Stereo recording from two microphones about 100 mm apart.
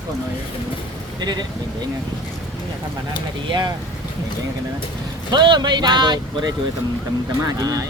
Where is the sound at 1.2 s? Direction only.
45° right (ahead or behind).